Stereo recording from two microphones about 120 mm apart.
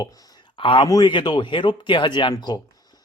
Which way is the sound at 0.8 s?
35° left (ahead or behind).